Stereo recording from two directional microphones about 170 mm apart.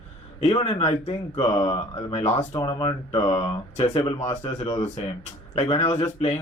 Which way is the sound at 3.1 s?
35° left (ahead or behind).